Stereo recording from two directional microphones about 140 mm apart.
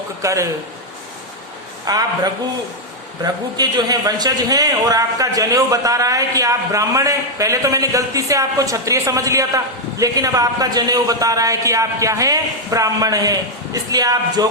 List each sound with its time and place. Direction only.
0.2 s a man's voice: 20° right (ahead or behind)
1.9 s a man's voice: 25° right (ahead or behind)
3.6 s a man's voice: 30° right (ahead or behind)